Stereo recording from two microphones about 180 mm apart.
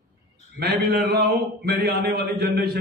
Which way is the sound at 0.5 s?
60° right (ahead or behind).